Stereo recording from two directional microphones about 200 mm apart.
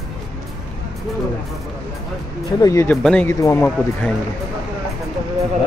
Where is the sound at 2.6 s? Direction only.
15° left (ahead or behind).